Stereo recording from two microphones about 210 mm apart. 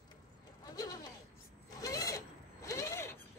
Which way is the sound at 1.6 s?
15° left (ahead or behind).